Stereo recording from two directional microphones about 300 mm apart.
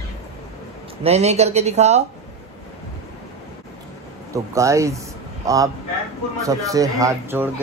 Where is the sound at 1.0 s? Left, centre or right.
Right.